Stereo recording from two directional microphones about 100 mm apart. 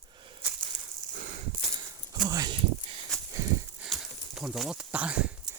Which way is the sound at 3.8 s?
5° right (ahead or behind).